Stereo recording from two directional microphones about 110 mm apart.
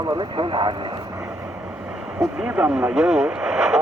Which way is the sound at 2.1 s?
5° right (ahead or behind).